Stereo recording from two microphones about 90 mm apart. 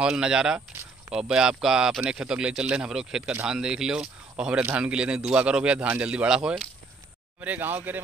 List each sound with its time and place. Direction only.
0.0 s speech: 10° right (ahead or behind)
7.3 s speech: 20° right (ahead or behind)